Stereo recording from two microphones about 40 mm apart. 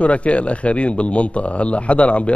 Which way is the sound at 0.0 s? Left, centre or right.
Left.